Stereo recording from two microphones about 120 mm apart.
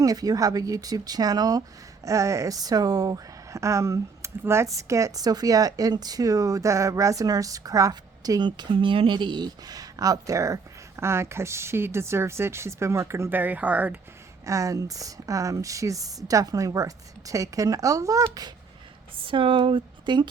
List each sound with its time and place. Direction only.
0.0 s speech: 30° right (ahead or behind); by 14.0 s 10° right (ahead or behind)
14.4 s speech: 25° right (ahead or behind)
19.2 s speech: 45° right (ahead or behind)